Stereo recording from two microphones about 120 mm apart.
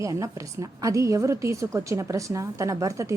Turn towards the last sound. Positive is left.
turn(degrees=-25)  # may be behind; listen again after turning